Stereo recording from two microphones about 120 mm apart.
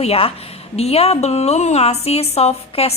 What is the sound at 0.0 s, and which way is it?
A woman's voice, 55° left (ahead or behind).